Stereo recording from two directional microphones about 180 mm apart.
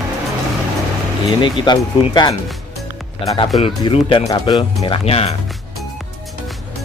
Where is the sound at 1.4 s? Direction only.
25° left (ahead or behind).